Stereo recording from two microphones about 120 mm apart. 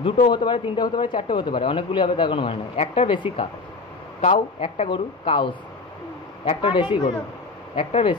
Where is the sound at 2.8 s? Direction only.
60° left (ahead or behind).